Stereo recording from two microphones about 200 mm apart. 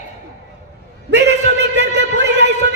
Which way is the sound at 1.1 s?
60° right (ahead or behind).